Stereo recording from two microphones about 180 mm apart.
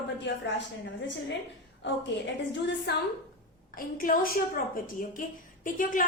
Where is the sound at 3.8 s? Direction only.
50° left (ahead or behind).